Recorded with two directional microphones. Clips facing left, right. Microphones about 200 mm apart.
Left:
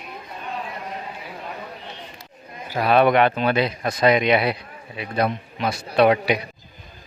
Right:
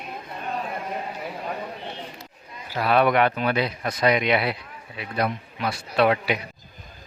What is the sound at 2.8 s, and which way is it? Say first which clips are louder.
Speech: left 3 dB; 20° left (ahead or behind).